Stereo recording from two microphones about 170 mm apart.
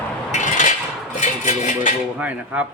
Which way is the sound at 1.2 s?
45° left (ahead or behind).